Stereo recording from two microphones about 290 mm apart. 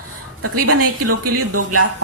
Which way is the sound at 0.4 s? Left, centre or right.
Right.